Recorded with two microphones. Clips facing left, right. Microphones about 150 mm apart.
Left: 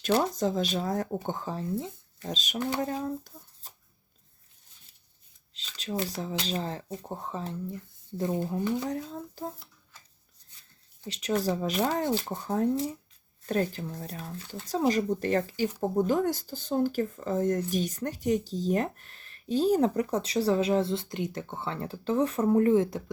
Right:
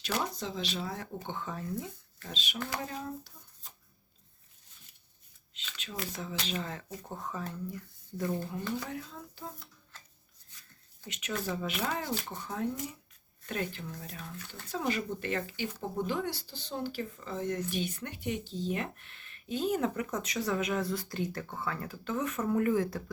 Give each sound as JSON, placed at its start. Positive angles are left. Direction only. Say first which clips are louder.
{"t": 0.1, "sound": "speech", "louder": "left 9 dB", "side_deg": 45}
{"t": 2.2, "sound": "speech", "louder": "left 7 dB", "side_deg": 40}
{"t": 2.6, "sound": "speech", "louder": "left 8 dB", "side_deg": 25}
{"t": 3.0, "sound": "a sound", "louder": "left 7 dB", "side_deg": 50}
{"t": 5.5, "sound": "speech", "louder": "left 8 dB", "side_deg": 35}
{"t": 8.9, "sound": "speech", "louder": "left 7 dB", "side_deg": 35}
{"t": 10.6, "sound": "speech", "louder": "left 6 dB", "side_deg": 30}